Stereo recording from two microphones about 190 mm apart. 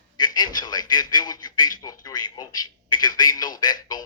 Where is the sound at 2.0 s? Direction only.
20° left (ahead or behind).